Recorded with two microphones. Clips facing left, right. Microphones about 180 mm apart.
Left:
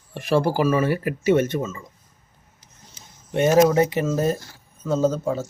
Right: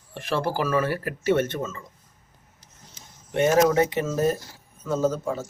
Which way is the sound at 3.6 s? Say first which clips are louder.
Left 2 dB; 30° left (ahead or behind).